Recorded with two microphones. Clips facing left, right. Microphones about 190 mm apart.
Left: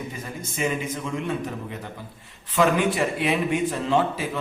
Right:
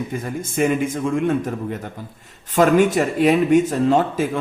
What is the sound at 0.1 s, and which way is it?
Speech, 50° right (ahead or behind).